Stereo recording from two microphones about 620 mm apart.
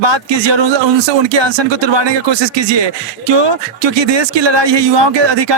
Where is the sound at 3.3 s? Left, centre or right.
Right.